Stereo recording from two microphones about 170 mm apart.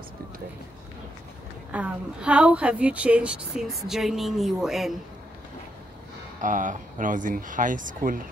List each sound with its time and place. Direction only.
1.7 s a woman's voice: 10° right (ahead or behind)
6.4 s speech: 50° right (ahead or behind)